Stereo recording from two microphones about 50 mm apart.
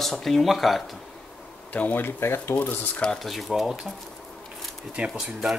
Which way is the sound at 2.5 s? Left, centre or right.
Left.